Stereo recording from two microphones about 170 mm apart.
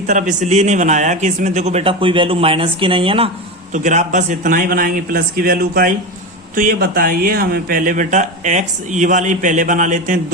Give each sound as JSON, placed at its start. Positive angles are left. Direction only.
{"t": 0.1, "sound": "a man's voice", "side_deg": -45}
{"t": 3.7, "sound": "a man's voice", "side_deg": -45}